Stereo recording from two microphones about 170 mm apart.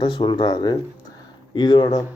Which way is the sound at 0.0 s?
30° left (ahead or behind).